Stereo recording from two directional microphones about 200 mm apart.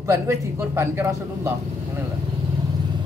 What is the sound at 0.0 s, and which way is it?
Speech, 15° right (ahead or behind).